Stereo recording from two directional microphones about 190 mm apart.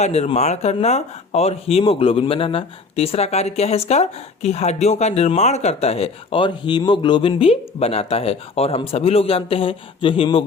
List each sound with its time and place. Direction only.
0.0 s speech: 35° left (ahead or behind)